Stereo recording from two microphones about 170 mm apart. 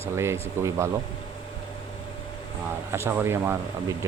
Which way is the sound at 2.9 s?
15° right (ahead or behind).